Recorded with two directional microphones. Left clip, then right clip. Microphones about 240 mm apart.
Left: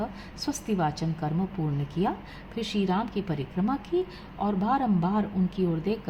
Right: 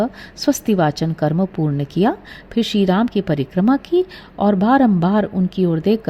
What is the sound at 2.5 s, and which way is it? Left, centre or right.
Speech, right.